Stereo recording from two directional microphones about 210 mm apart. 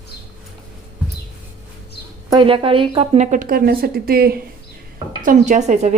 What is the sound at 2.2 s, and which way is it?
Speech, 25° right (ahead or behind).